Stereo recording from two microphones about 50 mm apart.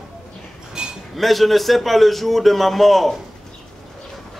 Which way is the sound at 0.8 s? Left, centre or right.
Centre.